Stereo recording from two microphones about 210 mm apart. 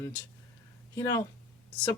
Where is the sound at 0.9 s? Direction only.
15° left (ahead or behind).